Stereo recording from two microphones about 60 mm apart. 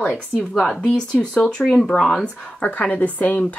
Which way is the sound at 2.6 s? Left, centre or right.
Left.